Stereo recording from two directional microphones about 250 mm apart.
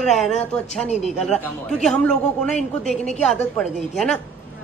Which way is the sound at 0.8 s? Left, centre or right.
Left.